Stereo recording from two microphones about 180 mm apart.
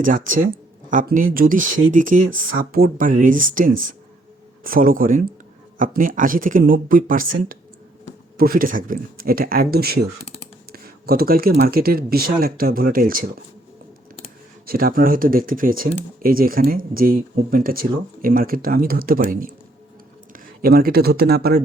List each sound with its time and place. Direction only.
0.0 s speech: 45° right (ahead or behind)
14.7 s speech: 55° right (ahead or behind)